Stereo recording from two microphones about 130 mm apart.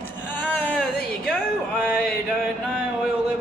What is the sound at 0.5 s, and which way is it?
Speech, 10° left (ahead or behind).